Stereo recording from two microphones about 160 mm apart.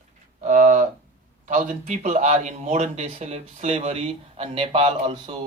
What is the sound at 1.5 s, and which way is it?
Speech, 50° right (ahead or behind).